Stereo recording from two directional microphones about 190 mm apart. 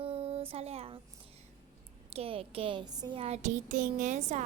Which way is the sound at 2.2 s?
30° right (ahead or behind).